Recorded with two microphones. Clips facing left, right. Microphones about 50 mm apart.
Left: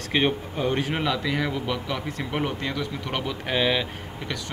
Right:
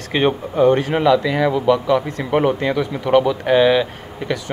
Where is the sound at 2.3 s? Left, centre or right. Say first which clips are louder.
Right 12 dB; centre.